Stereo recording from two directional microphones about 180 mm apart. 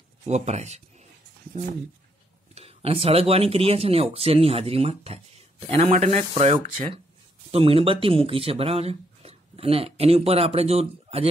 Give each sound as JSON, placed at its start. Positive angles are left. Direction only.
{"t": 0.2, "sound": "speech", "side_deg": -40}
{"t": 2.5, "sound": "speech", "side_deg": -30}